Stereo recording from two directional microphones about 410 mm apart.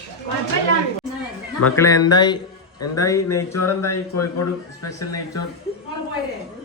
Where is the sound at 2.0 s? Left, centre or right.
Centre.